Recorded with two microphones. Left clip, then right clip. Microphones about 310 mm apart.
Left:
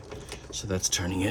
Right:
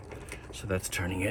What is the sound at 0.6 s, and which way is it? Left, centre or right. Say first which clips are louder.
Speech: left 3 dB; centre.